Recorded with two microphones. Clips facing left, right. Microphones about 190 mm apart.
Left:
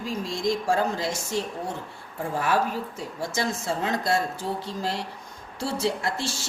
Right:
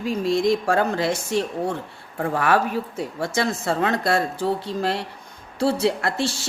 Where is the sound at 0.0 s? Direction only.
60° right (ahead or behind).